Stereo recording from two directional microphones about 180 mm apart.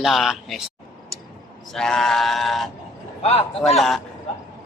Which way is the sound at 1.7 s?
5° left (ahead or behind).